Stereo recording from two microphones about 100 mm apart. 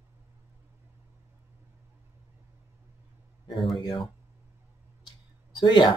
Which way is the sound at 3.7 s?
55° left (ahead or behind).